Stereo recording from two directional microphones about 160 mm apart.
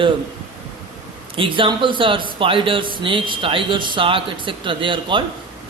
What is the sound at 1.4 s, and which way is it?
Speech, 30° right (ahead or behind).